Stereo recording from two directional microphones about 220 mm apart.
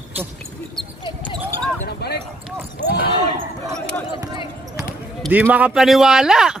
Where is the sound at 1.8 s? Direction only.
50° left (ahead or behind).